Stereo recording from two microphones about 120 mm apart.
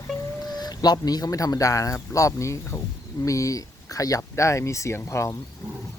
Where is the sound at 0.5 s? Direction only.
35° left (ahead or behind).